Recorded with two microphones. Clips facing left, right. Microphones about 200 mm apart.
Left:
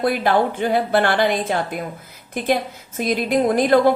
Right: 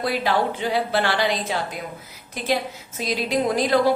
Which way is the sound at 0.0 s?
50° left (ahead or behind).